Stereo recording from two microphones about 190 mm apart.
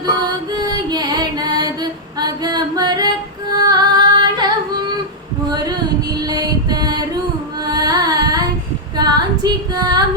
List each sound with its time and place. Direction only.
0.0 s music: 20° right (ahead or behind)
5.5 s female singing: 20° right (ahead or behind)
6.2 s mantra: 20° right (ahead or behind)
7.6 s carnatic music: 20° right (ahead or behind)
9.0 s female singing: 20° right (ahead or behind)